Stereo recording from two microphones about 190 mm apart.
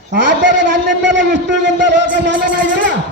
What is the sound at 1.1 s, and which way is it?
A man's voice, 70° right (ahead or behind).